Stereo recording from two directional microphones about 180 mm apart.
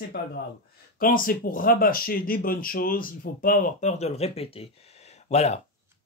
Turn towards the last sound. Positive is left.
turn(degrees=35)  # may be behind; listen again after turning